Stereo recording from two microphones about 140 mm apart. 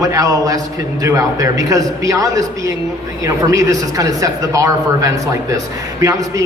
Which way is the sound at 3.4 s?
25° right (ahead or behind).